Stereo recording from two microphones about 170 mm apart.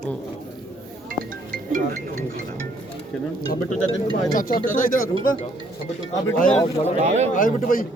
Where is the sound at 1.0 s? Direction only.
55° right (ahead or behind).